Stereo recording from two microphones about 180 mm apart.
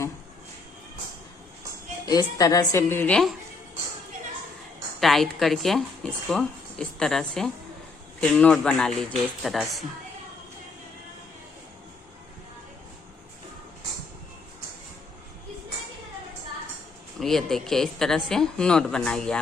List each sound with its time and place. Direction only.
2.0 s a woman's voice: 20° left (ahead or behind)
4.9 s a woman's voice: centre (ahead or behind)
17.2 s a woman's voice: centre (ahead or behind)